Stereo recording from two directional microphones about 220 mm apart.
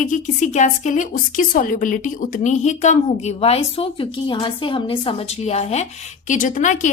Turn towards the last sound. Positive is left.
turn(degrees=35)  # may be behind; listen again after turning